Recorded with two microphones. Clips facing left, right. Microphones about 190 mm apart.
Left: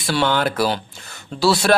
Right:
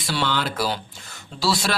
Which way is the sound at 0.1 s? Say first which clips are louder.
Left 6 dB; 55° left (ahead or behind).